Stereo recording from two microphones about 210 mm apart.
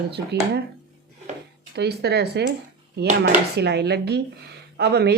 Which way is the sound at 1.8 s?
50° right (ahead or behind).